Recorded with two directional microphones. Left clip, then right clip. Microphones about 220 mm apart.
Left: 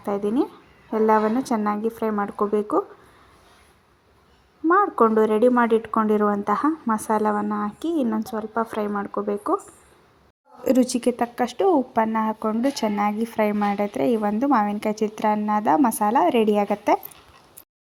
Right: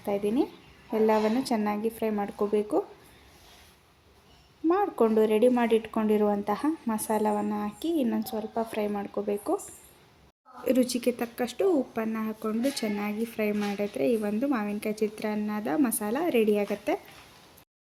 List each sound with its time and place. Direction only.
0.0 s speech: 15° left (ahead or behind)
4.7 s speech: 10° left (ahead or behind)
10.6 s speech: 20° left (ahead or behind)